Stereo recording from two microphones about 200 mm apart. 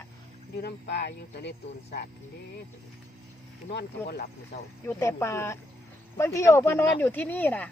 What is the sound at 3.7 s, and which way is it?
Speech, 55° left (ahead or behind).